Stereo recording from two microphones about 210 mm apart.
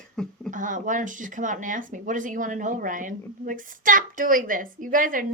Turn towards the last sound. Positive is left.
turn(degrees=-40)  # may be behind; listen again after turning